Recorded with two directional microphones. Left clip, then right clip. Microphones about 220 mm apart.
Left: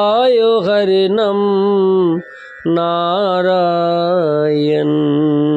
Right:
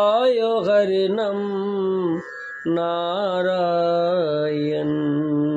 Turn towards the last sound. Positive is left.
turn(degrees=40)  # may be behind; listen again after turning